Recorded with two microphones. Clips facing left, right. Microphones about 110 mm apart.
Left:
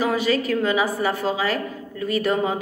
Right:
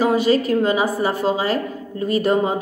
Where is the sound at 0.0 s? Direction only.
30° right (ahead or behind).